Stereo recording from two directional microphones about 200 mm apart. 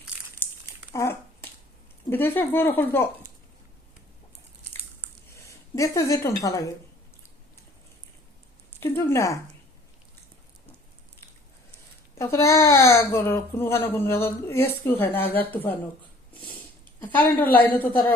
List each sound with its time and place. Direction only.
0.9 s a sound: 15° left (ahead or behind)
2.0 s speech: 10° left (ahead or behind)
5.5 s a woman's voice: 15° left (ahead or behind)
8.8 s a sound: 15° left (ahead or behind)
12.1 s speech: 15° left (ahead or behind)
17.0 s a woman's voice: 10° left (ahead or behind)